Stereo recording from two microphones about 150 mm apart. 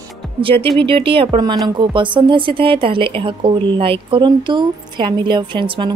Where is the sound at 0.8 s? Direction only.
35° right (ahead or behind).